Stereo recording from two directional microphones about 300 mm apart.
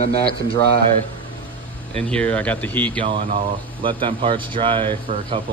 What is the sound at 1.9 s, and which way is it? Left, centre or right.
Speech, centre.